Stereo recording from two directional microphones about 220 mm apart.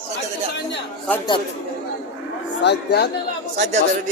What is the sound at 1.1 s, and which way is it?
Speech, 5° left (ahead or behind).